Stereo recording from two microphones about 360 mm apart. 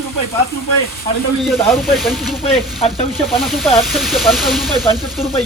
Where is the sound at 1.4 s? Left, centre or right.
Centre.